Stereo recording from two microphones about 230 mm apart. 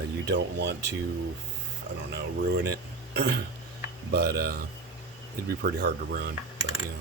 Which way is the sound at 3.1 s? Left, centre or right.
Right.